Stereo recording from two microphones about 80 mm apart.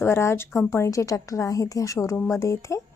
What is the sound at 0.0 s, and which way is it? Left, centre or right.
A woman's voice, left.